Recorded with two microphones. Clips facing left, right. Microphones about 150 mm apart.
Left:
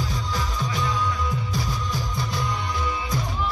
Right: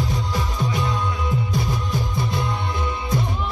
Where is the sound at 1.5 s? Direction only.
55° right (ahead or behind).